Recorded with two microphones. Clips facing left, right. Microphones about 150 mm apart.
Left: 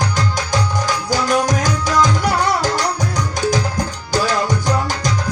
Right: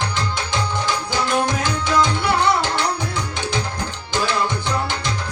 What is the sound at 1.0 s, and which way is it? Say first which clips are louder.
Music: left 5 dB; 40° left (ahead or behind).